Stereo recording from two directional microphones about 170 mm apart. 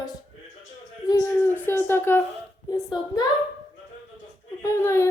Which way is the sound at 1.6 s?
10° left (ahead or behind).